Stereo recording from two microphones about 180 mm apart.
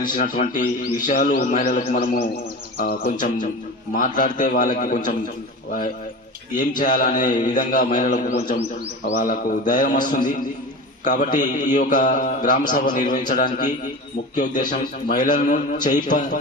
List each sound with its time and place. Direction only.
0.1 s a man's voice: 50° left (ahead or behind)
14.7 s a man's voice: 50° left (ahead or behind)